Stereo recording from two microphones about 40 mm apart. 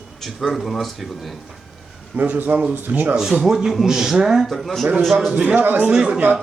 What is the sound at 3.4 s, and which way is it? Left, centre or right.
Speech, centre.